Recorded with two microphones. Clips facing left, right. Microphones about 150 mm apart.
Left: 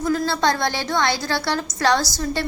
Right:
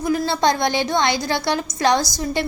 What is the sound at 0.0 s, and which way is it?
A woman's voice, 15° right (ahead or behind).